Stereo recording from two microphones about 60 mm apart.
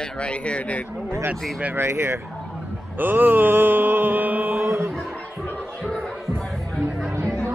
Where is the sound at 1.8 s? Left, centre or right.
Right.